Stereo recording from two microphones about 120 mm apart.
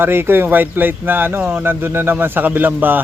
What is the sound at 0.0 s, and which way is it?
Speech, 20° right (ahead or behind).